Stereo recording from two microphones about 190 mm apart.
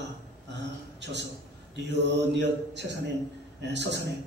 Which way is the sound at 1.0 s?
65° right (ahead or behind).